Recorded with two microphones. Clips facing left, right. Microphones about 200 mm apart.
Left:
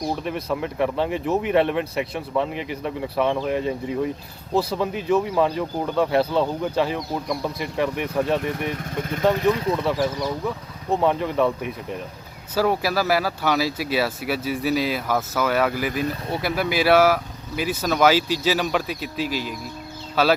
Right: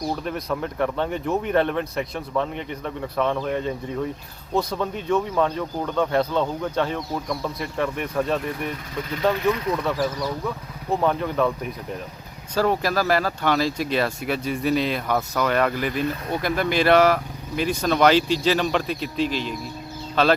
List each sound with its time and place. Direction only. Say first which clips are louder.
0.1 s speech: left 1 dB; 5° left (ahead or behind)
8.8 s speech: left 2 dB; 50° left (ahead or behind)
9.3 s speech: left 2 dB; 30° left (ahead or behind)
10.0 s speech: left 1 dB; centre (ahead or behind)